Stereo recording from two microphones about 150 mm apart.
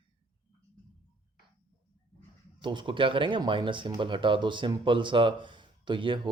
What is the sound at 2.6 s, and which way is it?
Speech, 30° right (ahead or behind).